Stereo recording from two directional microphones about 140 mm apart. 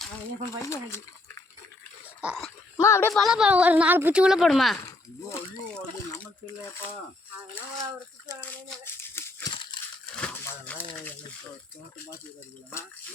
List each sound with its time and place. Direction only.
0.6 s speech: 20° left (ahead or behind)
2.2 s speech: centre (ahead or behind)
2.7 s speech: 20° left (ahead or behind)
3.1 s speech: centre (ahead or behind)
6.4 s speech: 15° left (ahead or behind)
8.4 s rattle: 15° left (ahead or behind)
9.5 s a sound: 35° left (ahead or behind)
10.2 s speech: 10° left (ahead or behind)